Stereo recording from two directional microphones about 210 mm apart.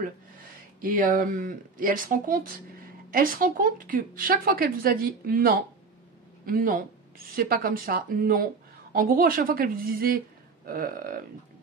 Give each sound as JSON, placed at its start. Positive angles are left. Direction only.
{"t": 0.7, "sound": "speech", "side_deg": -40}